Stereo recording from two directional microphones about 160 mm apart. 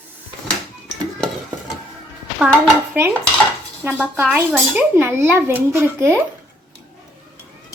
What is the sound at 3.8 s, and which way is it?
A child's voice, 10° right (ahead or behind).